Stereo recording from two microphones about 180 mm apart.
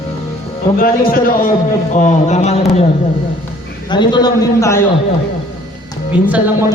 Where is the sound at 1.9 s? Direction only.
40° left (ahead or behind).